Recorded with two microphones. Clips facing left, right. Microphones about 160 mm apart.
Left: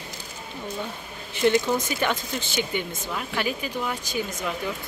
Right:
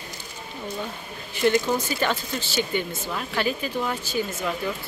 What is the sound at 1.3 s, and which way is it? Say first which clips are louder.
Speech: even; 20° left (ahead or behind).